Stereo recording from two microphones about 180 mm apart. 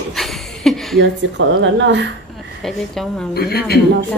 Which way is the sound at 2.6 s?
Centre (ahead or behind).